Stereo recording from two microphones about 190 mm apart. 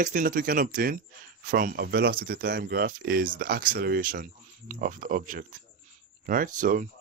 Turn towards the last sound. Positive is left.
turn(degrees=-45)  # may be behind; listen again after turning